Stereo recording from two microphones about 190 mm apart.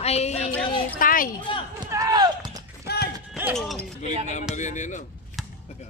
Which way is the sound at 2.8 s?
55° left (ahead or behind).